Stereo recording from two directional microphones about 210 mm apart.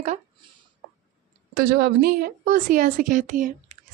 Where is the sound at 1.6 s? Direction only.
50° right (ahead or behind).